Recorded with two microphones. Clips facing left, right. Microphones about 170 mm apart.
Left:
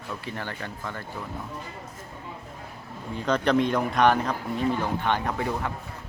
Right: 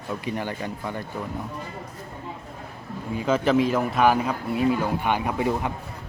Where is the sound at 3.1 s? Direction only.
5° right (ahead or behind).